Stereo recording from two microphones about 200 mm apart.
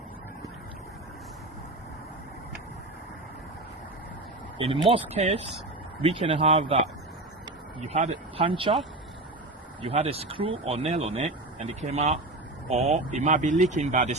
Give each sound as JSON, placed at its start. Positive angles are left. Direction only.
{"t": 4.5, "sound": "a man's voice", "side_deg": -25}
{"t": 7.8, "sound": "speech", "side_deg": -35}
{"t": 9.8, "sound": "speech", "side_deg": -30}